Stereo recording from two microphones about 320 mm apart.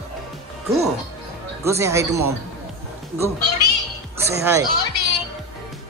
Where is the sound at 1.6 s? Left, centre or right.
Centre.